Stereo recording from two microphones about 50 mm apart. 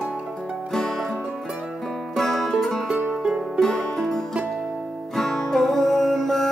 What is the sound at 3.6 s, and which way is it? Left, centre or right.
Music, centre.